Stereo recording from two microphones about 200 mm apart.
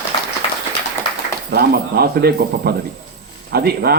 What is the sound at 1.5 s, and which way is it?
Speech, 50° right (ahead or behind).